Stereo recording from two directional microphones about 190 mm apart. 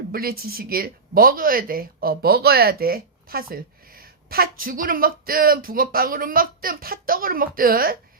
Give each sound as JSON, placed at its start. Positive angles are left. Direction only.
{"t": 0.1, "sound": "speech", "side_deg": -50}